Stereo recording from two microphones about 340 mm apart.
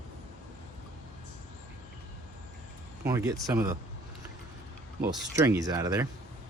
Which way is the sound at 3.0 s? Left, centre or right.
Centre.